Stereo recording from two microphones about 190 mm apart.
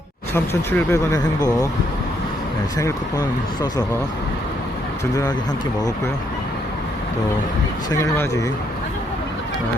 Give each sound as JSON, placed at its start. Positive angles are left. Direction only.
{"t": 0.3, "sound": "speech", "side_deg": 10}
{"t": 2.7, "sound": "speech", "side_deg": 20}
{"t": 7.9, "sound": "speech", "side_deg": 15}